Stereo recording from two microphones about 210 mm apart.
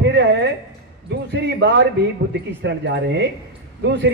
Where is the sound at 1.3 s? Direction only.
55° right (ahead or behind).